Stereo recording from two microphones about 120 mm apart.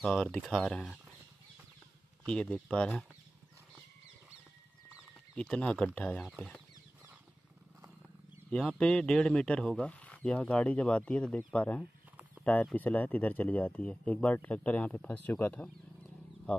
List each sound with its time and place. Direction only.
0.0 s speech: 5° left (ahead or behind)
2.2 s speech: 5° left (ahead or behind)
5.3 s speech: 5° left (ahead or behind)
8.5 s speech: 10° left (ahead or behind)